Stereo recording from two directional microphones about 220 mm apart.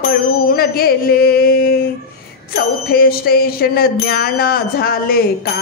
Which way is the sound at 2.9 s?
45° left (ahead or behind).